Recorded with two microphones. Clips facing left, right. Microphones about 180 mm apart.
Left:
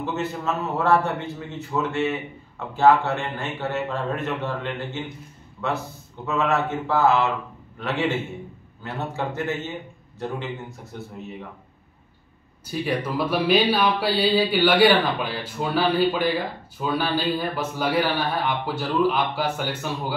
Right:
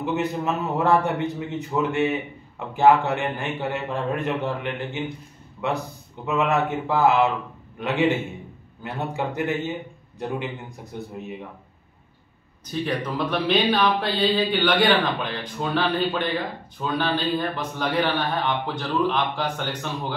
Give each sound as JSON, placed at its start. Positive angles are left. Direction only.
{"t": 0.0, "sound": "a man's voice", "side_deg": -15}
{"t": 12.7, "sound": "speech", "side_deg": 10}